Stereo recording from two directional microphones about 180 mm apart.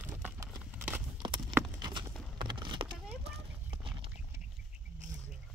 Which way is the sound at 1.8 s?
25° right (ahead or behind).